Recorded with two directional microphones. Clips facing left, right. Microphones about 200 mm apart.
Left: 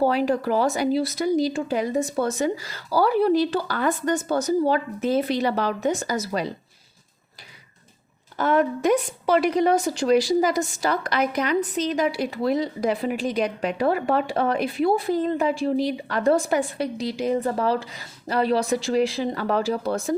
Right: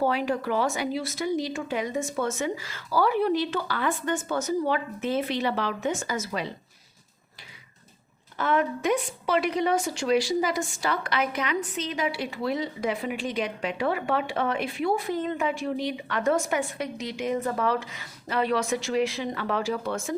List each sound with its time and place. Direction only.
0.0 s a woman's voice: 35° left (ahead or behind)
8.4 s a woman's voice: 40° left (ahead or behind)